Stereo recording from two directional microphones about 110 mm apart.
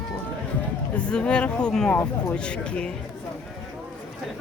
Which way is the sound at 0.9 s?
10° left (ahead or behind).